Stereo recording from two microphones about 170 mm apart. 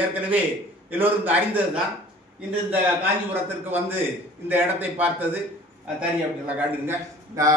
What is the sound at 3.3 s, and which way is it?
Speech, 10° right (ahead or behind).